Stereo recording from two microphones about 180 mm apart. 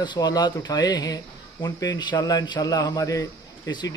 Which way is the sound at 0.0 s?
25° left (ahead or behind).